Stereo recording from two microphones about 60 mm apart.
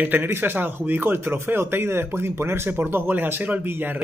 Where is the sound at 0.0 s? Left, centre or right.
Right.